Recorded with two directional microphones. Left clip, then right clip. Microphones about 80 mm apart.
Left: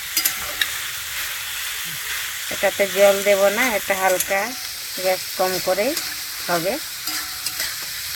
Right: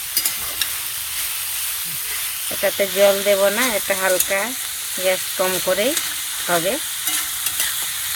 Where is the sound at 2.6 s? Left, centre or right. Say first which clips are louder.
Even; centre.